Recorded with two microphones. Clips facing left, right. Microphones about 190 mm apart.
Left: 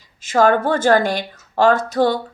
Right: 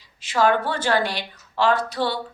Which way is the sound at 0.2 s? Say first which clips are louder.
Left 5 dB; 45° left (ahead or behind).